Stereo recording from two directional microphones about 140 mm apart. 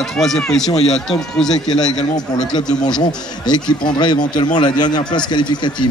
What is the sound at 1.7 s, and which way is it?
A man's voice, 30° left (ahead or behind).